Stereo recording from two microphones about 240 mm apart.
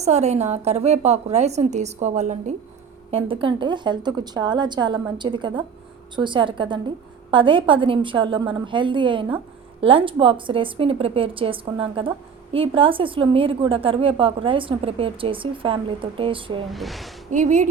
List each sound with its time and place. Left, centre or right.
0.0 s a woman's voice: right
16.6 s speech: centre
17.3 s speech: right